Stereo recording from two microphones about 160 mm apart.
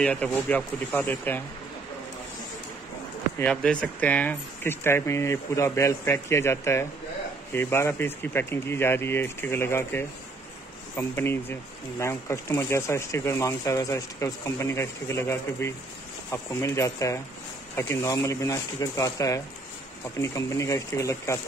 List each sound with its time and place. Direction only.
0.0 s speech: 10° left (ahead or behind)
3.3 s speech: 5° left (ahead or behind)